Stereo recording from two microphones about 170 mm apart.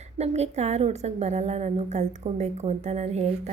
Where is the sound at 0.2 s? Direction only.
40° right (ahead or behind).